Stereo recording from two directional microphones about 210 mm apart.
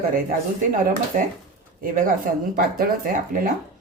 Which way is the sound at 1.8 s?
40° right (ahead or behind).